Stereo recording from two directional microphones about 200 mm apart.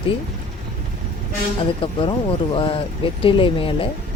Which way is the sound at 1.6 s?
25° left (ahead or behind).